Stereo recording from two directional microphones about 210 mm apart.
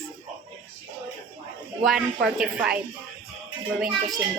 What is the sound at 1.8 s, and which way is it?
Speech, centre (ahead or behind).